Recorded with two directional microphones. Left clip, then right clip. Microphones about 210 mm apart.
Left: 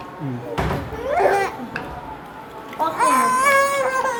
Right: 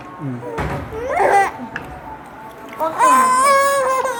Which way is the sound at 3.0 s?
45° right (ahead or behind).